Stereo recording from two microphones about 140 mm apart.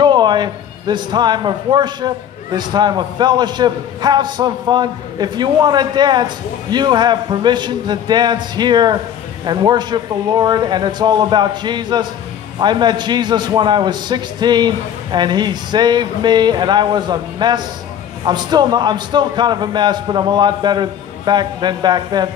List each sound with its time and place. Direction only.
0.0 s a man's voice: 30° right (ahead or behind)